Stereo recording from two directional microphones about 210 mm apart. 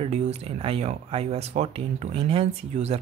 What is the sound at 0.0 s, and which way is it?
Speech, 30° right (ahead or behind).